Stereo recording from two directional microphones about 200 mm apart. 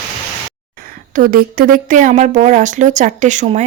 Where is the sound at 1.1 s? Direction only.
45° right (ahead or behind).